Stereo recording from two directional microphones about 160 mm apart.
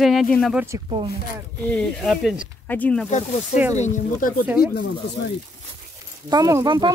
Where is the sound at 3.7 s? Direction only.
50° left (ahead or behind).